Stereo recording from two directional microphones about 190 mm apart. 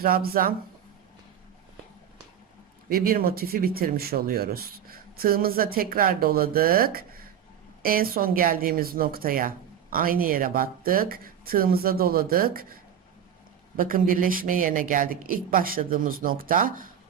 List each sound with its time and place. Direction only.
0.0 s speech: 50° right (ahead or behind)
2.9 s speech: 50° right (ahead or behind)